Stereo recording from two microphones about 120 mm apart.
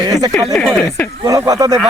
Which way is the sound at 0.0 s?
35° right (ahead or behind).